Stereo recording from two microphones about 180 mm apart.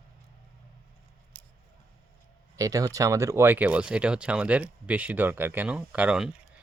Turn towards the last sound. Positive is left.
turn(degrees=-5)  # may be behind; listen again after turning